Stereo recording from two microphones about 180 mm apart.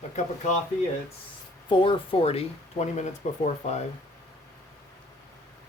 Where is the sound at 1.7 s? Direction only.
30° left (ahead or behind).